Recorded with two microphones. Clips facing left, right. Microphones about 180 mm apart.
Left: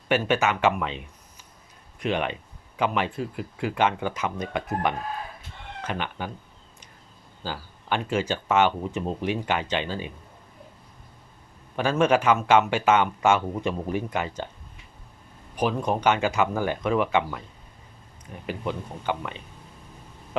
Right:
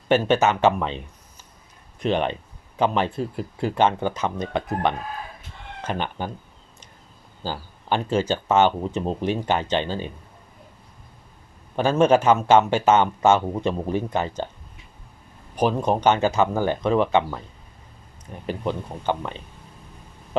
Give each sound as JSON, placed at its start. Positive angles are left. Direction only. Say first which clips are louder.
{"t": 0.1, "sound": "speech", "louder": "right 4 dB", "side_deg": -35}
{"t": 5.9, "sound": "speech", "louder": "right 4 dB", "side_deg": -35}
{"t": 7.4, "sound": "speech", "louder": "right 4 dB", "side_deg": -35}
{"t": 11.8, "sound": "speech", "louder": "right 4 dB", "side_deg": -30}
{"t": 15.5, "sound": "speech", "louder": "right 4 dB", "side_deg": -25}
{"t": 18.4, "sound": "speech", "louder": "right 4 dB", "side_deg": -30}